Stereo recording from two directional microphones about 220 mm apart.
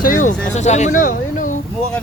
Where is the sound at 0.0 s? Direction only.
35° left (ahead or behind).